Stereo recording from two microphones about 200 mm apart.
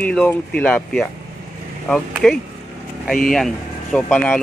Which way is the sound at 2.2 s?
Centre (ahead or behind).